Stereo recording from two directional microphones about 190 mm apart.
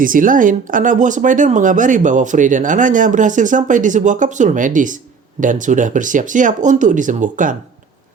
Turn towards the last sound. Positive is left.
turn(degrees=-40)  # may be behind; listen again after turning